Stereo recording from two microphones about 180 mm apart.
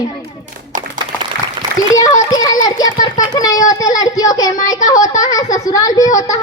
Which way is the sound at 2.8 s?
20° left (ahead or behind).